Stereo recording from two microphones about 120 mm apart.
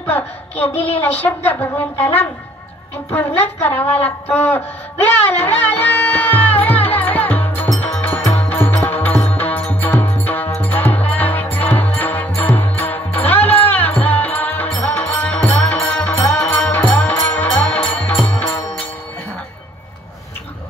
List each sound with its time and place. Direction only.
0.0 s a woman's voice: 15° left (ahead or behind)
3.1 s a sound: 15° left (ahead or behind)
7.8 s music: 15° left (ahead or behind)